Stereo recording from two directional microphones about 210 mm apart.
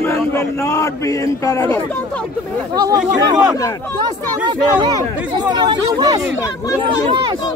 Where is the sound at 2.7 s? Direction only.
20° right (ahead or behind).